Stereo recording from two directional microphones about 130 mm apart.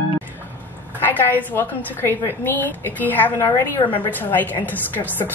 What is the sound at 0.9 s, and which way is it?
A woman's voice, 15° left (ahead or behind).